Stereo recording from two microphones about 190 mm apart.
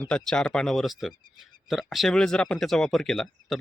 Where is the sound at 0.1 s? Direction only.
5° left (ahead or behind).